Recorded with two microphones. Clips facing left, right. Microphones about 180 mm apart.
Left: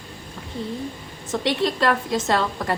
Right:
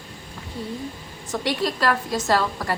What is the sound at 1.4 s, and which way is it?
A woman's voice, 25° left (ahead or behind).